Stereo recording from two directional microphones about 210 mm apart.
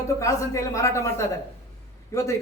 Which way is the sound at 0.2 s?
15° left (ahead or behind).